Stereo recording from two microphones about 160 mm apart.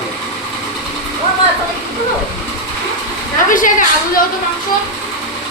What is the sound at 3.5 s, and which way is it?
Speech, 55° left (ahead or behind).